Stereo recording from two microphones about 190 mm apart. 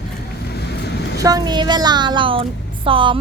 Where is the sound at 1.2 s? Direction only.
20° right (ahead or behind).